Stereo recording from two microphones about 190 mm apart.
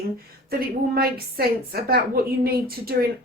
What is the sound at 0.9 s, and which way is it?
A woman's voice, 55° right (ahead or behind).